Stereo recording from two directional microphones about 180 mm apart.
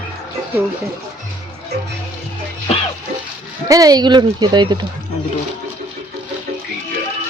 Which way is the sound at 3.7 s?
20° right (ahead or behind).